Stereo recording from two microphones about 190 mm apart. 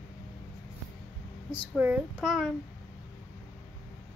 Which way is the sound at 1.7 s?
5° right (ahead or behind).